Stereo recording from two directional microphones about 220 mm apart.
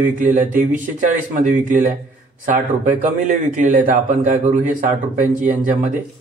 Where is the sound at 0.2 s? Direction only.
35° right (ahead or behind).